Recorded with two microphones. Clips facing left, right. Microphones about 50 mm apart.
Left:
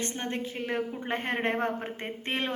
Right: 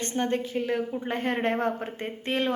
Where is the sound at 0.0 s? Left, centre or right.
Centre.